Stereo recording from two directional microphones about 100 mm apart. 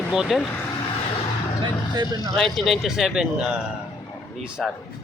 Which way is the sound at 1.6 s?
45° right (ahead or behind).